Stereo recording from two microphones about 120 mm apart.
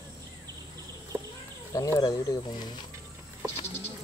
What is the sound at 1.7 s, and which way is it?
Speech, 30° left (ahead or behind).